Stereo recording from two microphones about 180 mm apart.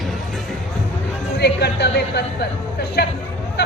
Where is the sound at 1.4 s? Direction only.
65° left (ahead or behind).